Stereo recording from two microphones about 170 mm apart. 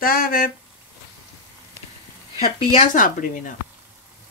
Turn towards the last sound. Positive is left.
turn(degrees=50)  # may be behind; listen again after turning